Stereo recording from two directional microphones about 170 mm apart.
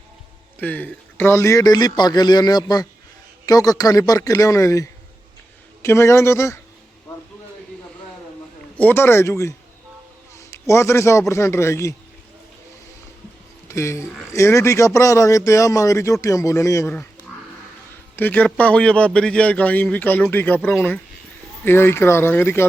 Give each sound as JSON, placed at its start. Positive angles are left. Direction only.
{"t": 0.6, "sound": "a man's voice", "side_deg": 10}
{"t": 8.8, "sound": "a man's voice", "side_deg": 10}
{"t": 13.7, "sound": "a man's voice", "side_deg": 15}
{"t": 18.2, "sound": "a man's voice", "side_deg": 10}